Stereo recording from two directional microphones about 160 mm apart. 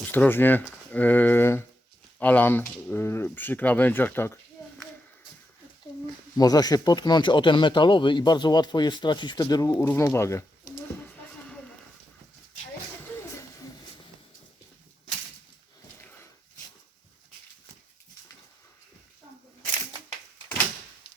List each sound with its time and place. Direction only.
0.1 s speech: 15° left (ahead or behind)
4.6 s a sound: 20° left (ahead or behind)
6.3 s speech: 25° left (ahead or behind)